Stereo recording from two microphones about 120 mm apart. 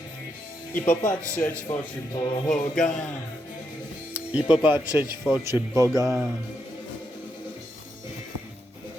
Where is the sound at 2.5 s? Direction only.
5° left (ahead or behind).